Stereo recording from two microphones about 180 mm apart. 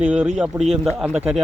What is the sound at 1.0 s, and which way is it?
Speech, centre (ahead or behind).